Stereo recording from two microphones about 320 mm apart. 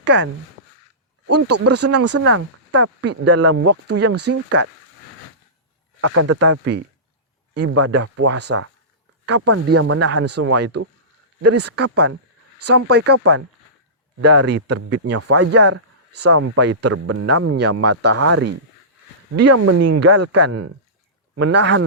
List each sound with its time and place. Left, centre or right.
0.0 s speech: right
1.3 s a man's voice: right
1.7 s speech: right
2.0 s a man's voice: right
3.2 s speech: right
3.5 s a man's voice: right
6.0 s a man's voice: right
7.5 s speech: right
7.8 s a man's voice: right
21.4 s speech: right